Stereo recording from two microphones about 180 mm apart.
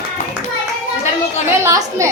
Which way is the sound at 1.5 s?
15° right (ahead or behind).